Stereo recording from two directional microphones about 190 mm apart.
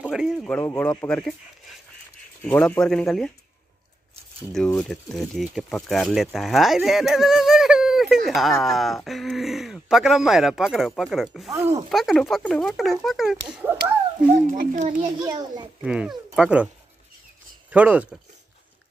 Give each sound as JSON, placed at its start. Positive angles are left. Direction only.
{"t": 0.0, "sound": "speech", "side_deg": -5}
{"t": 0.6, "sound": "speech", "side_deg": 10}
{"t": 2.4, "sound": "speech", "side_deg": 10}
{"t": 4.7, "sound": "speech", "side_deg": 0}
{"t": 11.5, "sound": "speech", "side_deg": -15}
{"t": 11.9, "sound": "speech", "side_deg": 0}
{"t": 14.5, "sound": "a child's voice", "side_deg": -40}
{"t": 15.0, "sound": "a child's voice", "side_deg": -25}
{"t": 15.8, "sound": "speech", "side_deg": -5}
{"t": 17.6, "sound": "speech", "side_deg": -5}